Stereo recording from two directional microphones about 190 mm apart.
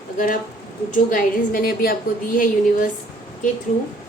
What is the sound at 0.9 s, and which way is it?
A woman's voice, 45° left (ahead or behind).